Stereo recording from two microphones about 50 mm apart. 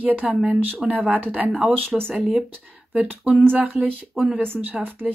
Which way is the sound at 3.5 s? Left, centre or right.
Right.